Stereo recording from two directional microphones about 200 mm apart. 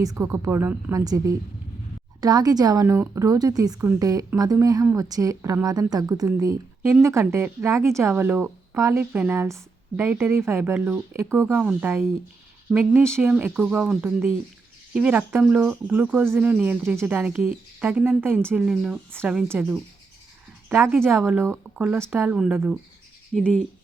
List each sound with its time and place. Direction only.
0.0 s a woman's voice: 15° right (ahead or behind)
23.3 s speech: 5° left (ahead or behind)